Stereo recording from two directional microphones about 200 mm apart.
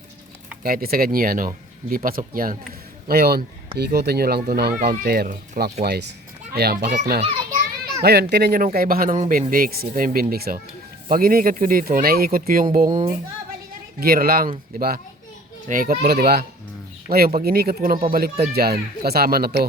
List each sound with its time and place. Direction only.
0.6 s a child's voice: 50° right (ahead or behind)
14.0 s speech: 50° right (ahead or behind)